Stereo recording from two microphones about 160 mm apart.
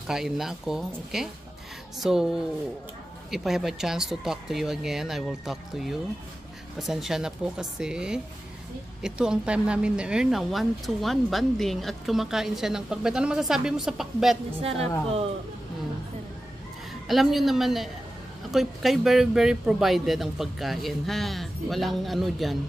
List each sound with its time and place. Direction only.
0.0 s speech: 5° right (ahead or behind)
3.3 s speech: centre (ahead or behind)
14.6 s a woman's voice: 40° right (ahead or behind)
17.1 s speech: centre (ahead or behind)